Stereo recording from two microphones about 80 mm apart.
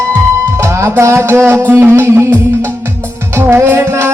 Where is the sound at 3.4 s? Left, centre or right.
Right.